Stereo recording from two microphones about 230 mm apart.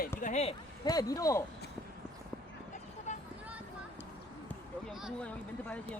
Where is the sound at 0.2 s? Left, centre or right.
Left.